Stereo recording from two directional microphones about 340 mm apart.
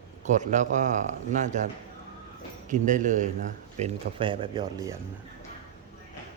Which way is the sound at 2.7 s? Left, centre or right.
Right.